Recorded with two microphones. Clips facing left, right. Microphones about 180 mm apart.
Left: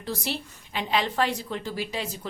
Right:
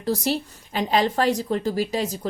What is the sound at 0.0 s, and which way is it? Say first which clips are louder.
A woman's voice: right 8 dB; 40° right (ahead or behind).